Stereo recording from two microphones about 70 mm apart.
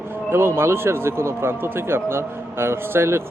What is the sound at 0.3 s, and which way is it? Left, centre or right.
Speech, right.